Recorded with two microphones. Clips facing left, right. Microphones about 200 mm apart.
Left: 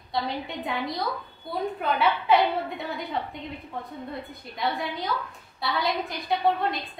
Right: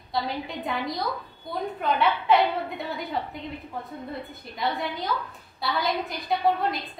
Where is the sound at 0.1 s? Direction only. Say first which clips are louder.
Even; centre (ahead or behind).